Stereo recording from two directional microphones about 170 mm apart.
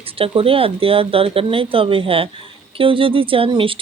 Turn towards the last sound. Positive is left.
turn(degrees=-30)  # may be behind; listen again after turning